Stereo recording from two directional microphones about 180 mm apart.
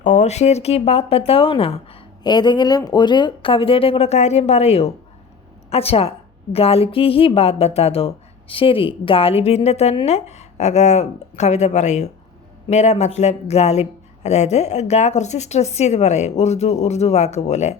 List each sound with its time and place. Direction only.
0.0 s a woman's voice: 40° left (ahead or behind)